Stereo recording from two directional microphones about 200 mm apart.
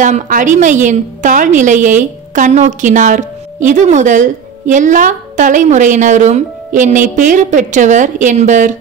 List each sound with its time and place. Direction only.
0.0 s a woman's voice: 40° right (ahead or behind)